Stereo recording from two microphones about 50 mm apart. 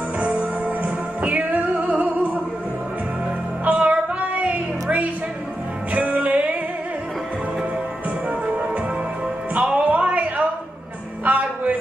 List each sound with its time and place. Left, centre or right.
0.2 s music: right
3.6 s music: right
9.8 s music: right
11.2 s a sound: right